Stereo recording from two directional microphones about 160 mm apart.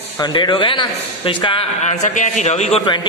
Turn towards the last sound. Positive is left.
turn(degrees=35)  # may be behind; listen again after turning